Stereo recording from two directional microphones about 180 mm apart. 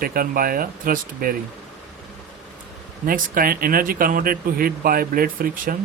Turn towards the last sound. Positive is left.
turn(degrees=-50)  # may be behind; listen again after turning